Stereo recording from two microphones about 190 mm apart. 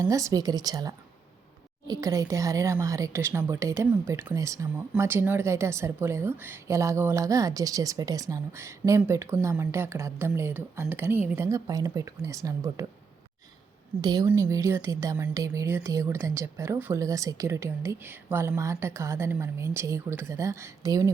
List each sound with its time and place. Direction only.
0.0 s a woman's voice: 20° right (ahead or behind)
14.0 s a woman's voice: 20° right (ahead or behind)